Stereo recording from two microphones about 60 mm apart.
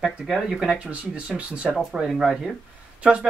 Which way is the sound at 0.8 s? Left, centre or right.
Right.